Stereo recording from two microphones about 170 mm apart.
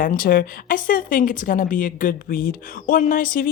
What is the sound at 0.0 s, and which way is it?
Speech, 55° left (ahead or behind).